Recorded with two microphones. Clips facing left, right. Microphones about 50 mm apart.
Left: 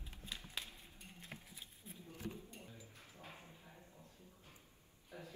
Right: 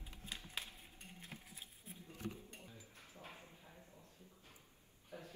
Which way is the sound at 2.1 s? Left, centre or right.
Right.